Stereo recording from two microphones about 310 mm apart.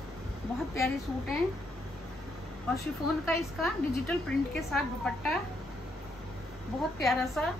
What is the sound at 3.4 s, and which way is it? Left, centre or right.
A woman's voice, centre.